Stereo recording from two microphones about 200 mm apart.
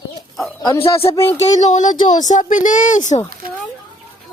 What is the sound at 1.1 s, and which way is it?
Speech, 10° left (ahead or behind).